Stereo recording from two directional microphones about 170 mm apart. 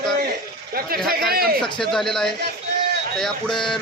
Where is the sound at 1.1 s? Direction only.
60° right (ahead or behind).